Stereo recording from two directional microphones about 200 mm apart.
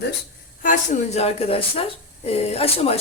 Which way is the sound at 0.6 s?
40° left (ahead or behind).